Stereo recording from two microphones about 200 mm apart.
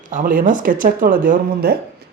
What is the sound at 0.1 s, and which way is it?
Speech, 45° right (ahead or behind).